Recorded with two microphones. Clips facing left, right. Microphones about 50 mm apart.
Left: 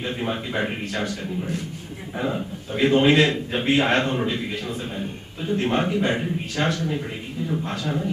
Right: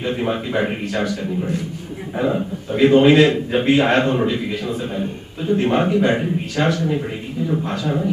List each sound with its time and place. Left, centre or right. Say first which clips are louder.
0.0 s a man's voice: right 5 dB; centre